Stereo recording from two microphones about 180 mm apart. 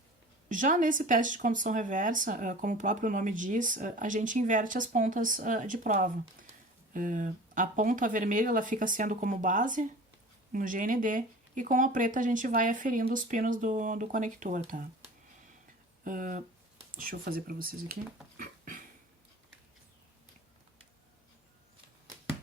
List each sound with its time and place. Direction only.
0.4 s speech: 45° right (ahead or behind)
16.0 s speech: 45° right (ahead or behind)
18.3 s a sound: 50° right (ahead or behind)